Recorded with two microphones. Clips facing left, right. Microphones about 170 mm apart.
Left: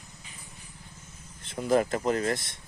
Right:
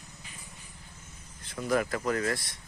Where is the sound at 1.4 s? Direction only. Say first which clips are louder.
Left 4 dB; 25° left (ahead or behind).